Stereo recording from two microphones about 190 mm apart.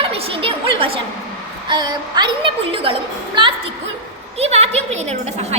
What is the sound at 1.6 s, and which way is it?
A woman's voice, 25° right (ahead or behind).